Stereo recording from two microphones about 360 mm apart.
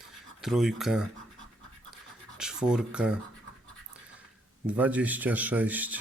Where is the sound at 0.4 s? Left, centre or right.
Centre.